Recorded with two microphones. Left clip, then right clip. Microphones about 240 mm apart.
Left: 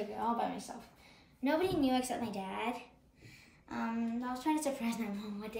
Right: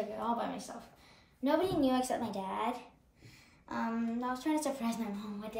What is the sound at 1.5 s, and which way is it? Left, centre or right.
Speech, centre.